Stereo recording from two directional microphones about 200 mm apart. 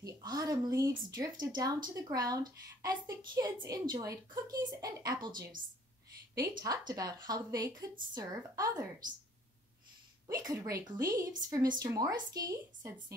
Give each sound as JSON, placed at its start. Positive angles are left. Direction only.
{"t": 0.0, "sound": "a woman's voice", "side_deg": -20}
{"t": 10.2, "sound": "a woman's voice", "side_deg": -15}